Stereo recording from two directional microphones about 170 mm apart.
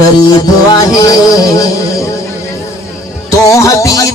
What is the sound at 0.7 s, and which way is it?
Music, 20° left (ahead or behind).